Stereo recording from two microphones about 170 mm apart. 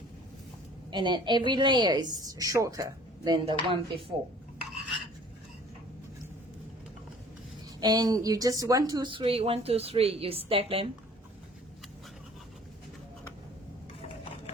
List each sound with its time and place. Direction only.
0.9 s a woman's voice: 25° right (ahead or behind)
7.8 s a woman's voice: 20° right (ahead or behind)